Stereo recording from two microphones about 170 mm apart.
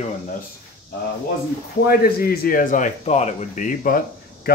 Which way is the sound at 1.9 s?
65° left (ahead or behind).